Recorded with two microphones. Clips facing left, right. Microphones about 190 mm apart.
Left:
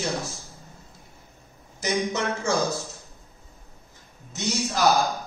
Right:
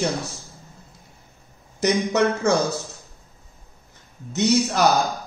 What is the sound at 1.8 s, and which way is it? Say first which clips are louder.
Speech: right 7 dB; 65° right (ahead or behind).